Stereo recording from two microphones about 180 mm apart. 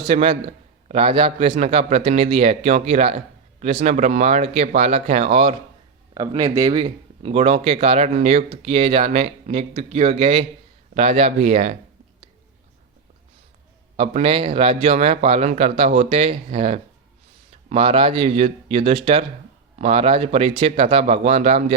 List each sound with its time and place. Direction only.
0.0 s speech: 30° right (ahead or behind)
6.1 s speech: 20° right (ahead or behind); by 11.8 s 35° right (ahead or behind)
13.9 s speech: 30° right (ahead or behind)